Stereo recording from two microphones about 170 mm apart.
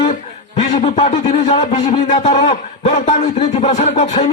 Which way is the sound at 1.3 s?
35° left (ahead or behind).